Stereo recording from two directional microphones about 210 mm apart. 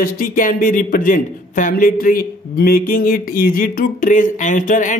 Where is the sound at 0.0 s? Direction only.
40° left (ahead or behind).